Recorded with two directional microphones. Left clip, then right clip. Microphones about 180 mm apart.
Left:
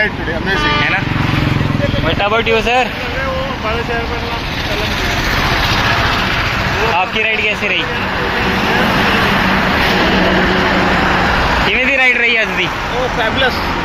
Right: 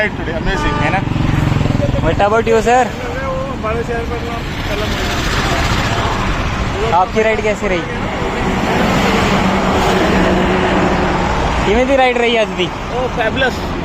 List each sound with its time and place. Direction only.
2.5 s speech: 5° right (ahead or behind)
7.3 s speech: 75° right (ahead or behind)
11.9 s speech: 15° right (ahead or behind)